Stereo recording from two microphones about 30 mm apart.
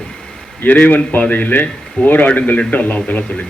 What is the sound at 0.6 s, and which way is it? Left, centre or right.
A man's voice, left.